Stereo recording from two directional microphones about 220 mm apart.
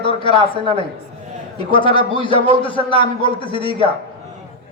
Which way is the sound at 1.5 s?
20° left (ahead or behind).